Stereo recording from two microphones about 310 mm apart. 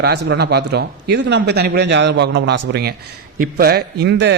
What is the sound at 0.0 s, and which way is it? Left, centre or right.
A man's voice, right.